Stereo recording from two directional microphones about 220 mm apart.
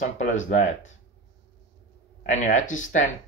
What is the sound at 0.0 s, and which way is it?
Speech, 35° left (ahead or behind).